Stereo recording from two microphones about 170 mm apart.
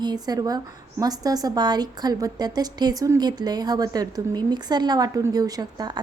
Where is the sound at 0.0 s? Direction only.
25° right (ahead or behind).